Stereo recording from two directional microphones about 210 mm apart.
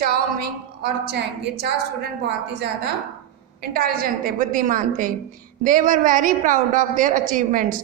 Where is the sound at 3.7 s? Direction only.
45° right (ahead or behind).